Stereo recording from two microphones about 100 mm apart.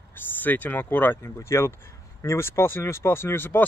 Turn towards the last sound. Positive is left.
turn(degrees=20)  # may be behind; listen again after turning